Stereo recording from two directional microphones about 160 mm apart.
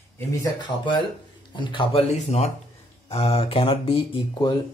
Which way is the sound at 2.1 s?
45° left (ahead or behind).